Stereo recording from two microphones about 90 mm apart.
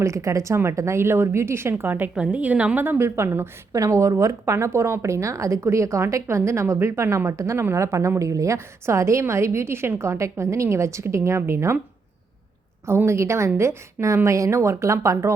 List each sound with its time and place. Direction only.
0.0 s a woman's voice: 35° right (ahead or behind)
2.1 s a woman's voice: 10° right (ahead or behind); by 11.8 s 30° right (ahead or behind)
12.8 s a woman's voice: 30° right (ahead or behind)